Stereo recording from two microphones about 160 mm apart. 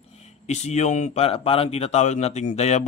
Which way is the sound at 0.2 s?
45° left (ahead or behind).